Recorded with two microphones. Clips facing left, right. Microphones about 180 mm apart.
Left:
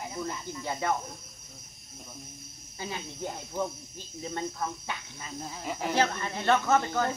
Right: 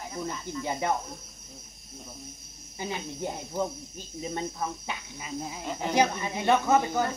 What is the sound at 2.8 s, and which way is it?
Speech, 15° right (ahead or behind).